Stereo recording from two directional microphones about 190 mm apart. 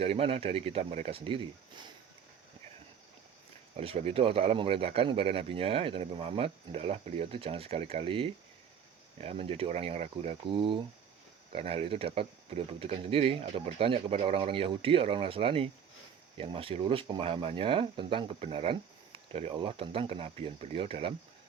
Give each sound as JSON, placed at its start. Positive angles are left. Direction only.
{"t": 0.0, "sound": "speech", "side_deg": -30}
{"t": 3.8, "sound": "speech", "side_deg": -30}